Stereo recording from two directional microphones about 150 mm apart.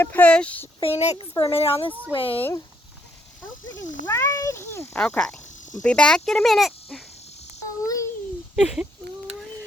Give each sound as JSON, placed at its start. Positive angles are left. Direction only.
{"t": 0.0, "sound": "speech", "side_deg": 10}
{"t": 0.8, "sound": "a child's voice", "side_deg": 40}
{"t": 1.1, "sound": "a woman's voice", "side_deg": 30}
{"t": 2.4, "sound": "speech", "side_deg": 20}
{"t": 4.0, "sound": "cat", "side_deg": 15}
{"t": 4.9, "sound": "speech", "side_deg": 5}
{"t": 7.9, "sound": "babbling", "side_deg": 20}
{"t": 8.5, "sound": "speech", "side_deg": -5}